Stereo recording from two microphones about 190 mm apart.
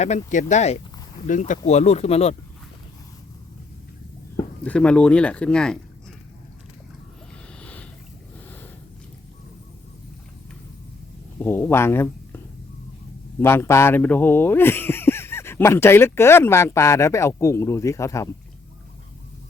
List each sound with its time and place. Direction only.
0.0 s speech: 40° left (ahead or behind)
4.6 s speech: 5° left (ahead or behind)
7.6 s a sound: 5° left (ahead or behind)
11.3 s speech: 10° left (ahead or behind)
13.4 s speech: 10° left (ahead or behind)